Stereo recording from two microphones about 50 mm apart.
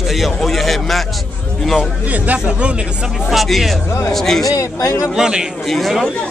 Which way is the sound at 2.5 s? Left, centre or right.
Right.